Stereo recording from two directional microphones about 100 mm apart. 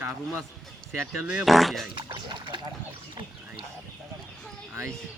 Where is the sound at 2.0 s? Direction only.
50° right (ahead or behind).